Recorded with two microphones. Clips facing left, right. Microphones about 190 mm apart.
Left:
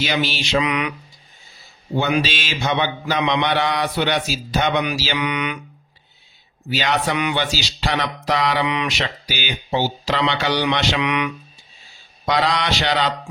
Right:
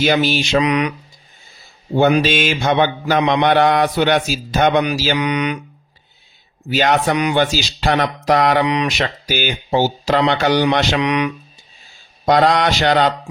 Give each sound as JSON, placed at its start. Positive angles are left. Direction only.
{"t": 0.0, "sound": "speech", "side_deg": -50}
{"t": 2.0, "sound": "speech", "side_deg": -50}
{"t": 6.7, "sound": "speech", "side_deg": -50}
{"t": 12.2, "sound": "speech", "side_deg": -50}